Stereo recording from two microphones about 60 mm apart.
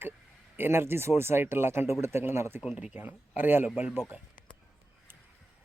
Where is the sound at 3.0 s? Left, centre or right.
Right.